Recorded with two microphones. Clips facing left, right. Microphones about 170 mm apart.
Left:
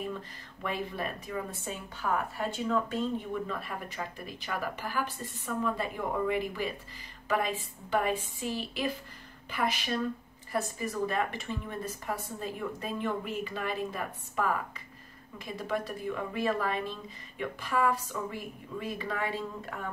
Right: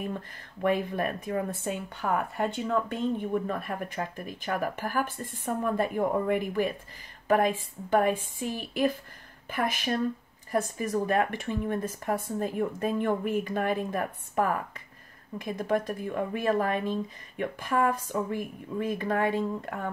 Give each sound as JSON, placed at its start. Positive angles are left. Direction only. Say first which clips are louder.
{"t": 0.6, "sound": "speech", "louder": "right 8 dB", "side_deg": -50}